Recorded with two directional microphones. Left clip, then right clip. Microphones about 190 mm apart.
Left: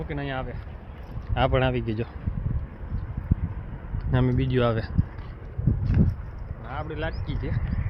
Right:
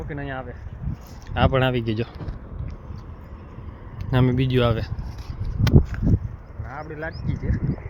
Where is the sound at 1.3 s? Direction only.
15° right (ahead or behind).